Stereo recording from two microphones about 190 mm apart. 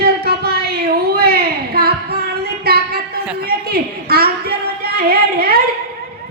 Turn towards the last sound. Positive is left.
turn(degrees=-55)  # may be behind; listen again after turning